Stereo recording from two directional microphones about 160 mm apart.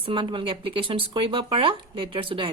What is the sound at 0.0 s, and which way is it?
Speech, 30° right (ahead or behind).